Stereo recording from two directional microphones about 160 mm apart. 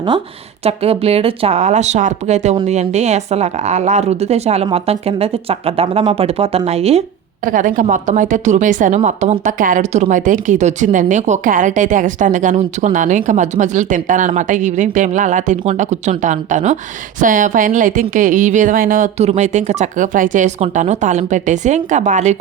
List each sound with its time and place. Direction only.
0.6 s a woman's voice: 40° right (ahead or behind)
7.4 s a woman's voice: 55° right (ahead or behind)